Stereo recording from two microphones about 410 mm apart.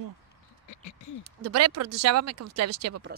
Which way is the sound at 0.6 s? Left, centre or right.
Left.